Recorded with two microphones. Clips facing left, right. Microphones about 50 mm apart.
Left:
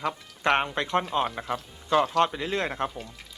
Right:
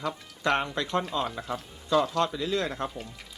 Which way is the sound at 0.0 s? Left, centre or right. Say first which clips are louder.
Left 2 dB; left.